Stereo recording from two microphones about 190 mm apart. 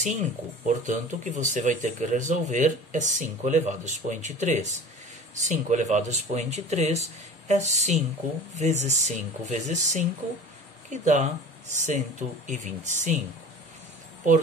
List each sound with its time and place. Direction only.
0.0 s speech: 40° right (ahead or behind)
10.9 s speech: 40° right (ahead or behind)